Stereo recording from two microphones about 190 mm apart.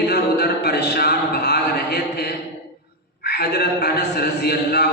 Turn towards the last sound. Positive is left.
turn(degrees=55)  # may be behind; listen again after turning